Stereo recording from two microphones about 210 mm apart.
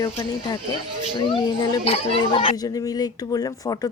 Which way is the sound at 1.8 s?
25° left (ahead or behind).